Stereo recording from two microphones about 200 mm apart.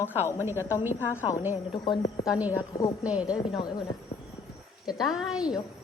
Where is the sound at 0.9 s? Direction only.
10° left (ahead or behind).